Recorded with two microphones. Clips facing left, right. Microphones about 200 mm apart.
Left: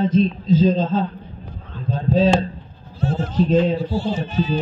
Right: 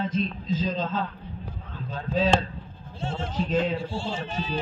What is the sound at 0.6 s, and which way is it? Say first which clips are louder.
A woman's voice: left 8 dB; 40° left (ahead or behind).